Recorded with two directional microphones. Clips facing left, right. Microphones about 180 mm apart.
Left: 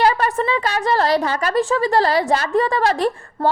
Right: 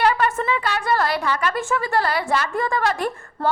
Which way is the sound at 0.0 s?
35° left (ahead or behind).